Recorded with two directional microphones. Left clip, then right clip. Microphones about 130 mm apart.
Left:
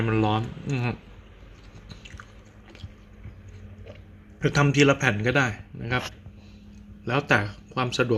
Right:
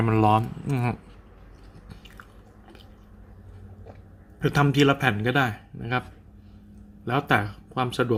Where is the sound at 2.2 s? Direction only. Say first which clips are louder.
Left 1 dB; 10° right (ahead or behind).